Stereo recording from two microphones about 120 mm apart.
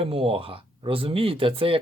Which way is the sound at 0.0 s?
50° right (ahead or behind).